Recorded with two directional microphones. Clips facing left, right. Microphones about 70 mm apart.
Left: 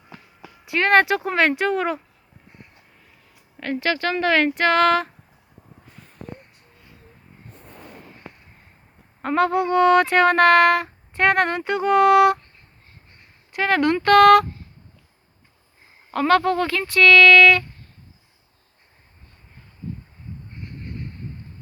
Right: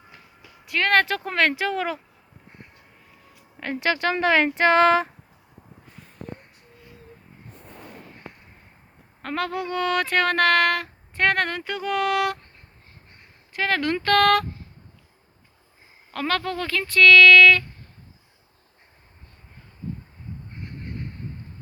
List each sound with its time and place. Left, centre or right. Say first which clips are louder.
0.7 s speech: left 4 dB; centre
3.6 s speech: left 1 dB; centre
9.2 s speech: left 8 dB; centre
13.5 s speech: left 5 dB; centre
16.1 s speech: left 8 dB; centre